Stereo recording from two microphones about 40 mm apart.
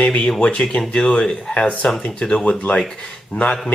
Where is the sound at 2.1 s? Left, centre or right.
Left.